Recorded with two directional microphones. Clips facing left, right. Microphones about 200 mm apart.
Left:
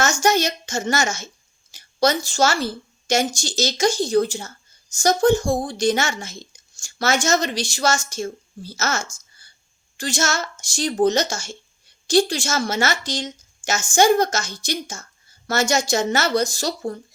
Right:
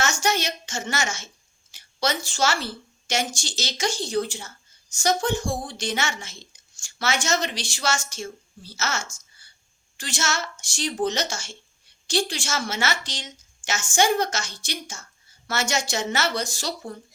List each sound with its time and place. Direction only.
0.0 s a woman's voice: 40° left (ahead or behind)